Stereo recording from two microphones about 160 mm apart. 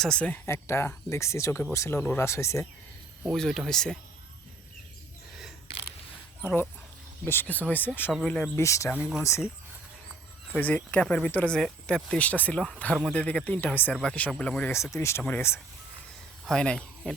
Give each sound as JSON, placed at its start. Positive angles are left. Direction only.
{"t": 0.0, "sound": "speech", "side_deg": 5}
{"t": 3.2, "sound": "speech", "side_deg": 0}
{"t": 6.4, "sound": "speech", "side_deg": 15}
{"t": 9.0, "sound": "speech", "side_deg": 0}
{"t": 10.5, "sound": "speech", "side_deg": 10}
{"t": 16.5, "sound": "speech", "side_deg": 5}